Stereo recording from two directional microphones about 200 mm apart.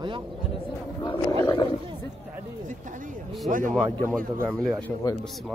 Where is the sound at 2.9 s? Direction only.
40° right (ahead or behind).